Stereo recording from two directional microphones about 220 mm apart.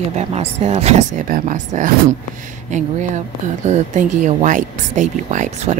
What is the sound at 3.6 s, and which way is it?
A woman's voice, 35° right (ahead or behind).